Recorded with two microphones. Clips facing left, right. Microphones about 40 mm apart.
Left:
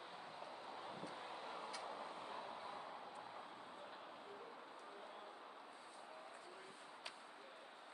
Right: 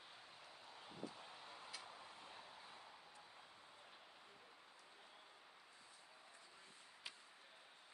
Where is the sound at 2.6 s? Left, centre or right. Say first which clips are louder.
Left 9 dB; left.